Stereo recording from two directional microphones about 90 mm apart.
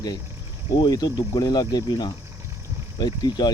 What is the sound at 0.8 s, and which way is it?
Speech, 50° left (ahead or behind).